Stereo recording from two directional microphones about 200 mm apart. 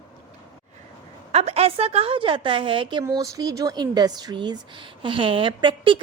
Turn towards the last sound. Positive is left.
turn(degrees=-25)  # may be behind; listen again after turning